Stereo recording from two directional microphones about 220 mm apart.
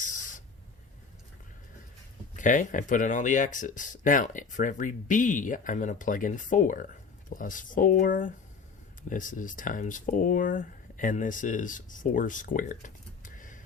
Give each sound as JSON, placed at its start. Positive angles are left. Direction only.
{"t": 2.3, "sound": "speech", "side_deg": 35}